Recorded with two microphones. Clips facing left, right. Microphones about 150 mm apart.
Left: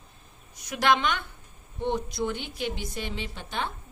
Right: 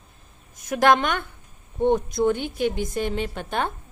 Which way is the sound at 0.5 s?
50° right (ahead or behind).